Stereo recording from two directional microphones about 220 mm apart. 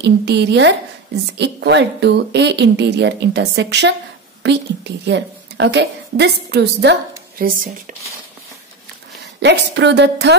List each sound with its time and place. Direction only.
0.0 s a woman's voice: 50° right (ahead or behind)
9.4 s a woman's voice: 50° right (ahead or behind)